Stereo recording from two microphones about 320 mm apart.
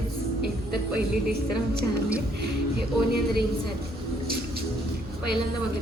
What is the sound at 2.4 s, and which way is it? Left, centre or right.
Speech, right.